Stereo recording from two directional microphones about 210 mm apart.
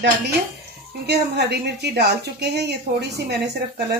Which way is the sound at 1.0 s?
50° right (ahead or behind).